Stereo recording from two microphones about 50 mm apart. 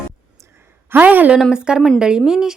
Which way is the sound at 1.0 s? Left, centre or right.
Right.